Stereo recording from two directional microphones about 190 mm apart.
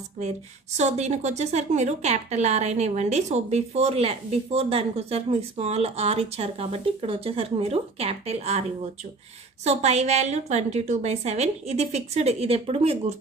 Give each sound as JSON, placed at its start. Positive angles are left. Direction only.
{"t": 0.7, "sound": "a woman's voice", "side_deg": -35}
{"t": 9.7, "sound": "a woman's voice", "side_deg": -35}